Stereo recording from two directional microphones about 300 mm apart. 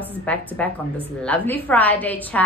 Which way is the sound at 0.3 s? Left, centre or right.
Centre.